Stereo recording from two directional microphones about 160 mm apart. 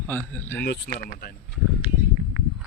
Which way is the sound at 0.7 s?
75° left (ahead or behind).